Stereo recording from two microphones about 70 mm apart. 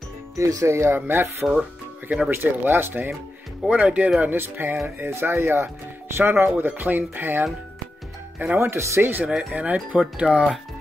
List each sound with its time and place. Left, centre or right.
0.4 s speech: right
0.9 s speech: right
3.6 s speech: centre
4.2 s speech: right
8.5 s speech: right
9.3 s speech: centre